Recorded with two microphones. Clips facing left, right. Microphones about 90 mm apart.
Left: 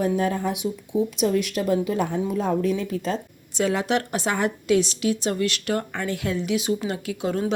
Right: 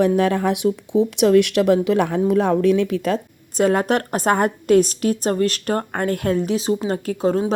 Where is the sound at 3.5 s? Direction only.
50° right (ahead or behind).